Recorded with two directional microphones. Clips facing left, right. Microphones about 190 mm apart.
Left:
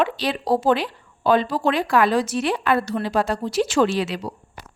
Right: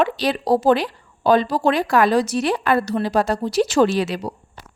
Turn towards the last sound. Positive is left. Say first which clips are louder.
# right 3 dB
turn(degrees=-40)  # may be behind; listen again after turning